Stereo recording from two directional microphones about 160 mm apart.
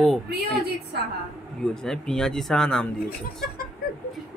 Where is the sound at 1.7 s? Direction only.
5° left (ahead or behind).